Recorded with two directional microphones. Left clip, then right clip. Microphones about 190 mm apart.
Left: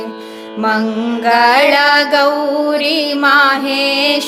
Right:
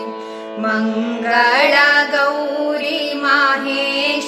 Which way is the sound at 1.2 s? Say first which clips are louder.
Left 4 dB; 60° left (ahead or behind).